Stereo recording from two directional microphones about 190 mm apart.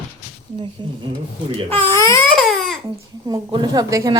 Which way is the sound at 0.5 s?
30° right (ahead or behind).